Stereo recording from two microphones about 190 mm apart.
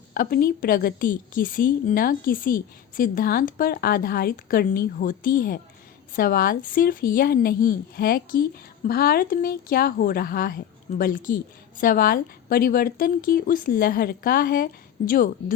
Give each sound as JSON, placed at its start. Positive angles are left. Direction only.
{"t": 0.1, "sound": "a woman's voice", "side_deg": 55}